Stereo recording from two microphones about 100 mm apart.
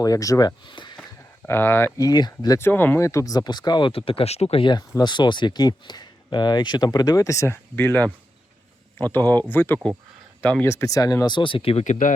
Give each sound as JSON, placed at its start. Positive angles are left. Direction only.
{"t": 0.0, "sound": "speech", "side_deg": 35}
{"t": 1.5, "sound": "speech", "side_deg": 20}
{"t": 2.0, "sound": "speech", "side_deg": 40}
{"t": 2.6, "sound": "speech", "side_deg": 20}
{"t": 4.7, "sound": "speech", "side_deg": 45}
{"t": 10.7, "sound": "speech", "side_deg": 30}
{"t": 11.3, "sound": "speech", "side_deg": 60}